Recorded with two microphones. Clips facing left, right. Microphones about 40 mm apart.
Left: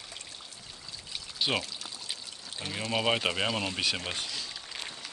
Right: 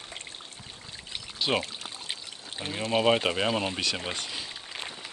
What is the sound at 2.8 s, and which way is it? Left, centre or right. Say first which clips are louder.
Speech: right 5 dB; centre.